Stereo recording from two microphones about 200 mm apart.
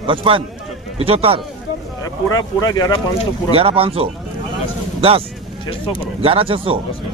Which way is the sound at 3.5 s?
30° right (ahead or behind).